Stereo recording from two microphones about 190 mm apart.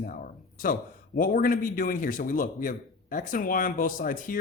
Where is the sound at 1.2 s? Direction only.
45° left (ahead or behind).